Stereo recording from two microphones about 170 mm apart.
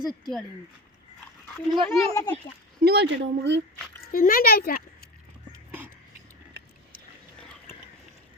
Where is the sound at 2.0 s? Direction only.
15° left (ahead or behind).